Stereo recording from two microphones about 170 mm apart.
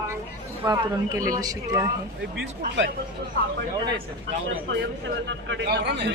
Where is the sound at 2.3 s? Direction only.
75° right (ahead or behind).